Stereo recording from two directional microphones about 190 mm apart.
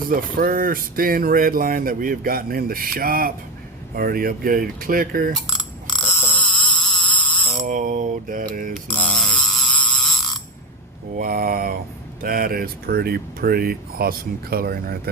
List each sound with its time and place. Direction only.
0.1 s speech: 50° right (ahead or behind)
5.5 s coin: centre (ahead or behind)
6.1 s a sound: 5° left (ahead or behind)
7.6 s mantra: 40° right (ahead or behind)
8.9 s snoring: 5° left (ahead or behind)
11.1 s speech: 50° right (ahead or behind)